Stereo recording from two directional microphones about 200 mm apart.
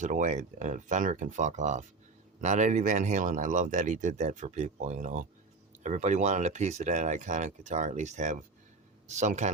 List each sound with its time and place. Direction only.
0.0 s speech: 40° right (ahead or behind)